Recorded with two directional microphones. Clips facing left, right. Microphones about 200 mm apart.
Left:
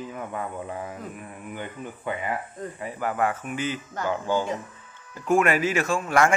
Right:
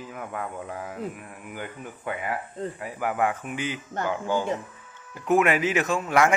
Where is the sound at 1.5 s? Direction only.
5° right (ahead or behind).